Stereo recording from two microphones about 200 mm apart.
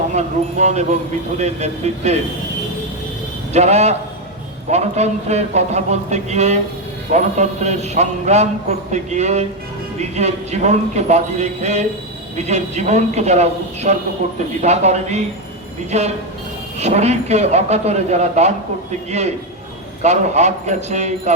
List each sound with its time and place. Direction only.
0.1 s a man's voice: 35° right (ahead or behind)
3.5 s a man's voice: 35° right (ahead or behind)
20.0 s a man's voice: 35° right (ahead or behind)